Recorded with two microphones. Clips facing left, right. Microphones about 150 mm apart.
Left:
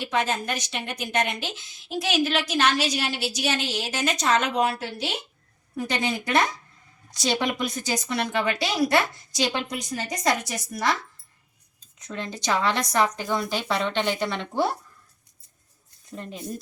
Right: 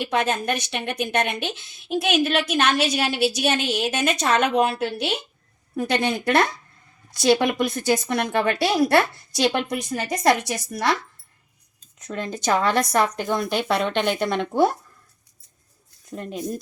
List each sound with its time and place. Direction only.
0.0 s a woman's voice: 60° right (ahead or behind)
4.5 s a woman's voice: 20° right (ahead or behind)
4.8 s a woman's voice: 65° right (ahead or behind)
12.0 s speech: 50° right (ahead or behind)